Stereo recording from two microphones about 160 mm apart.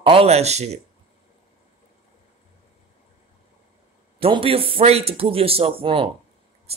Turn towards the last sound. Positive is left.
turn(degrees=-35)  # may be behind; listen again after turning